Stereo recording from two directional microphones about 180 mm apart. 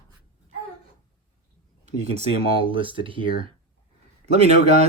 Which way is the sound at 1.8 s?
35° right (ahead or behind).